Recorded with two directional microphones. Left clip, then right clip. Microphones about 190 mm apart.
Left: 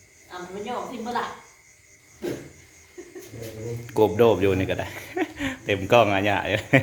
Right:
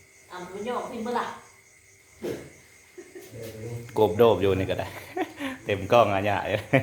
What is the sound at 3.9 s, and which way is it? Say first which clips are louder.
Speech: left 1 dB; 5° left (ahead or behind).